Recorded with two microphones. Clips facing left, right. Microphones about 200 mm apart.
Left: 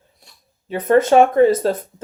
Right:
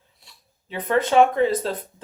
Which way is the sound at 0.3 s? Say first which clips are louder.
Left 11 dB; 45° left (ahead or behind).